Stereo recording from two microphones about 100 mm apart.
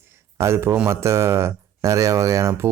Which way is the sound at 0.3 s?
25° right (ahead or behind).